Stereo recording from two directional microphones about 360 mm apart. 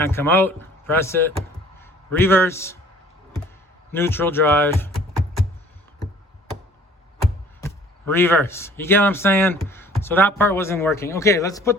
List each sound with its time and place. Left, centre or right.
0.1 s a man's voice: centre
3.9 s speech: centre
7.6 s speech: centre